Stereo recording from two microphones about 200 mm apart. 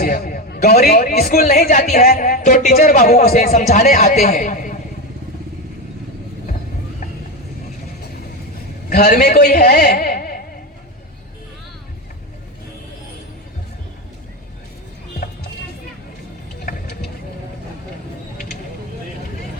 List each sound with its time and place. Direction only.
0.0 s a man's voice: 45° left (ahead or behind)
8.9 s a man's voice: 50° left (ahead or behind)